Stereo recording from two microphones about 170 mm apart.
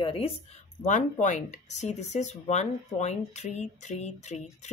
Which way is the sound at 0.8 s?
45° left (ahead or behind).